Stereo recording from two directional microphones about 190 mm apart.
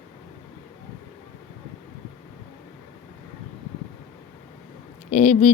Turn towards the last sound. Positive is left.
turn(degrees=40)  # may be behind; listen again after turning